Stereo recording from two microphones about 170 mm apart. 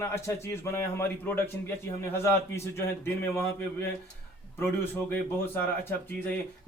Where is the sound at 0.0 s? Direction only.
15° left (ahead or behind).